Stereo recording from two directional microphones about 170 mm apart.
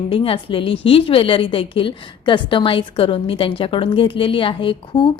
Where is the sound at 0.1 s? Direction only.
30° left (ahead or behind).